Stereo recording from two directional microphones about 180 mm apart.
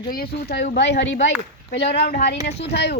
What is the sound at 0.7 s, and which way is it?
Speech, 75° left (ahead or behind).